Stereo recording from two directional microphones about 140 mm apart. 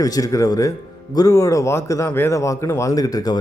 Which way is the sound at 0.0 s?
25° left (ahead or behind).